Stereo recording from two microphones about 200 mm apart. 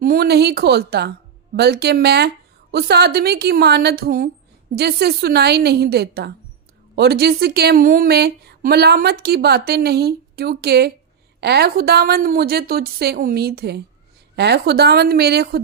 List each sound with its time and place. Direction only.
0.0 s a woman's voice: 50° right (ahead or behind)